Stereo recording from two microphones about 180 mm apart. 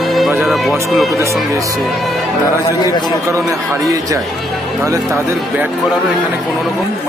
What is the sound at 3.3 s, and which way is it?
A man's voice, 15° right (ahead or behind).